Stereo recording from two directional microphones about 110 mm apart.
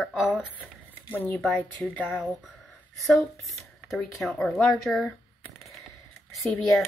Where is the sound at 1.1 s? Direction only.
15° left (ahead or behind).